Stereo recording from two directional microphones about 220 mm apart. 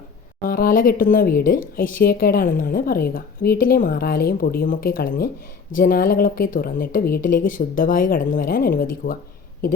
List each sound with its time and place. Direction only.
0.4 s speech: 40° left (ahead or behind)